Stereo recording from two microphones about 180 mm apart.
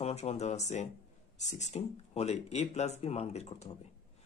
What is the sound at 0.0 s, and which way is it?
Speech, 35° left (ahead or behind).